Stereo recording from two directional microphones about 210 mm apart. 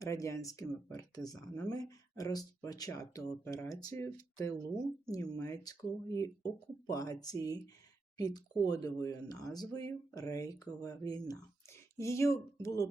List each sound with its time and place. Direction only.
0.0 s speech: 15° left (ahead or behind)